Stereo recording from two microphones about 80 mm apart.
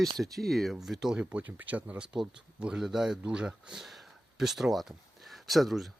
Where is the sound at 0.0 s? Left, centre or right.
Centre.